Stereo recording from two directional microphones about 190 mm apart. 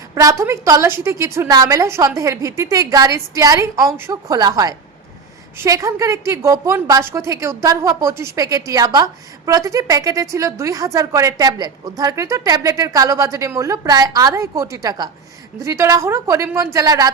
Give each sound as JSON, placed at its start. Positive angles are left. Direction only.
{"t": 0.1, "sound": "a woman's voice", "side_deg": -15}